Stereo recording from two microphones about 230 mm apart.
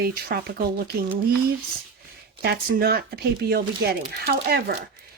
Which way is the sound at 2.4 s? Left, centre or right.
Right.